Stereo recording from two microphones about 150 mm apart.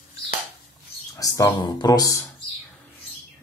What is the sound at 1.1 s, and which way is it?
Speech, 25° left (ahead or behind).